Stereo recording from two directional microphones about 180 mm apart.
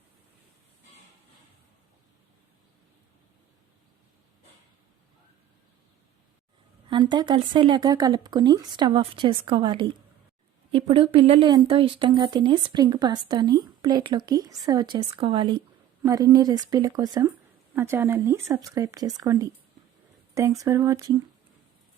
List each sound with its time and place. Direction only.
6.9 s speech: 25° right (ahead or behind)